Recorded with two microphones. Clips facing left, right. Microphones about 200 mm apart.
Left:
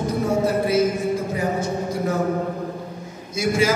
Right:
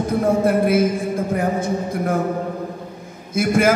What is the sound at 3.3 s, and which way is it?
Speech, 55° right (ahead or behind).